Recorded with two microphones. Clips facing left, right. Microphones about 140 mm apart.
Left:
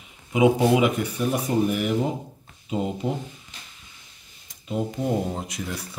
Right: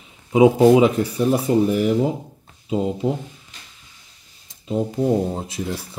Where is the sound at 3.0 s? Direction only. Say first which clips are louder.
Right 5 dB; 35° right (ahead or behind).